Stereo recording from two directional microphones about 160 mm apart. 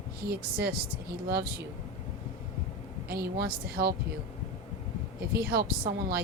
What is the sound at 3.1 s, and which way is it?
Speech, 75° right (ahead or behind).